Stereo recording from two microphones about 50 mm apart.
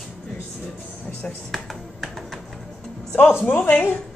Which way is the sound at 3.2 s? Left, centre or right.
Left.